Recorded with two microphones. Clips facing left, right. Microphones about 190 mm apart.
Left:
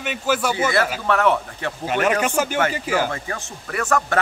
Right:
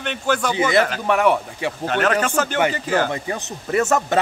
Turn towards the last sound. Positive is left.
turn(degrees=-20)  # may be behind; listen again after turning